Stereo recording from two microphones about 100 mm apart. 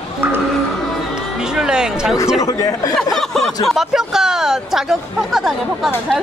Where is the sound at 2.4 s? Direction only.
35° left (ahead or behind).